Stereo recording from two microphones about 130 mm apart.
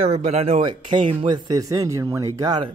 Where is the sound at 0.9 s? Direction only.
45° right (ahead or behind).